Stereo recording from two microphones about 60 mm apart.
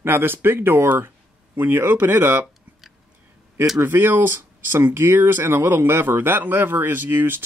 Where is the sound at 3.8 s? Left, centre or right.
Right.